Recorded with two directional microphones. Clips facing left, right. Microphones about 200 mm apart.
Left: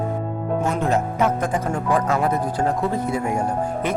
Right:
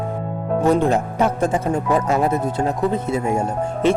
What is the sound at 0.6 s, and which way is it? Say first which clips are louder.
Speech: right 6 dB; 30° right (ahead or behind).